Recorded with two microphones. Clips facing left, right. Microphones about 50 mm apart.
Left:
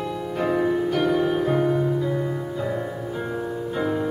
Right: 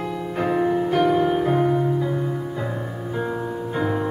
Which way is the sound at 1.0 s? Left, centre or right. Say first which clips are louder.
Right 4 dB; right.